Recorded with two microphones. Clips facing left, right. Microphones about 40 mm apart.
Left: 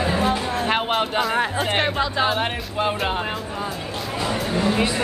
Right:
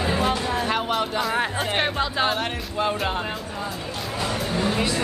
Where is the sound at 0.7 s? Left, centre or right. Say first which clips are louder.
Left 6 dB; left.